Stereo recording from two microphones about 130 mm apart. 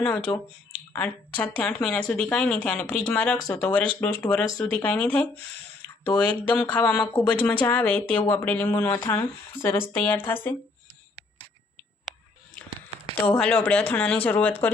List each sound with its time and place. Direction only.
0.0 s speech: 15° left (ahead or behind)
13.2 s speech: 10° left (ahead or behind)